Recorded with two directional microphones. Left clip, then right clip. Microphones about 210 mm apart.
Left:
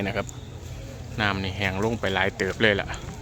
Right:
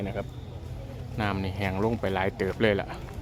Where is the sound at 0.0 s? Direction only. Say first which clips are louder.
Left 6 dB; 10° left (ahead or behind).